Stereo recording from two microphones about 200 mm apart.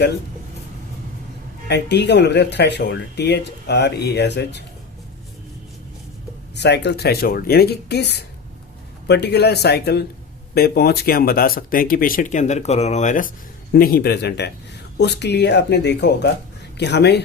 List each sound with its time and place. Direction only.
1.6 s speech: 60° left (ahead or behind)
6.6 s speech: 60° left (ahead or behind)